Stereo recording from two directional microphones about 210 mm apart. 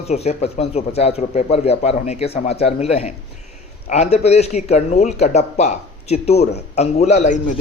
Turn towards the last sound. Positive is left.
turn(degrees=35)  # may be behind; listen again after turning